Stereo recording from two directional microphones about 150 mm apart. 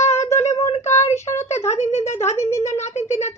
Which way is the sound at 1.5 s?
45° left (ahead or behind).